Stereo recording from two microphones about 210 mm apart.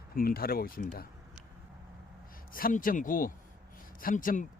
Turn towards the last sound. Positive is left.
turn(degrees=40)  # may be behind; listen again after turning